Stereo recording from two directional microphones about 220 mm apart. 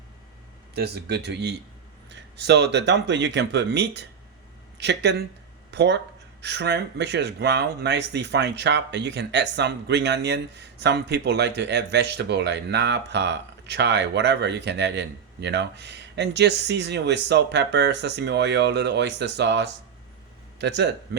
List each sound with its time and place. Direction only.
0.8 s speech: 45° right (ahead or behind)